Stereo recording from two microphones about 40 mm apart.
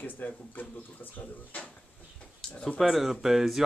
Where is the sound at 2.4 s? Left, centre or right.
Centre.